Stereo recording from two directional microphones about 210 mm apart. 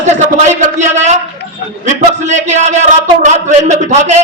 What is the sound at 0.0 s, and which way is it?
A man's voice, 35° right (ahead or behind).